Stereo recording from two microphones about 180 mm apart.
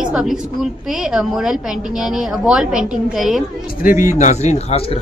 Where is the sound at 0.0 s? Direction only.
5° right (ahead or behind).